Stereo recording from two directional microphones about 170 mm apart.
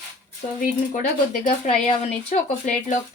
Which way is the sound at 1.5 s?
40° left (ahead or behind).